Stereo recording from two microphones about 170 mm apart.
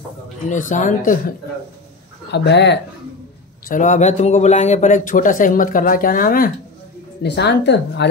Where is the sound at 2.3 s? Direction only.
90° left.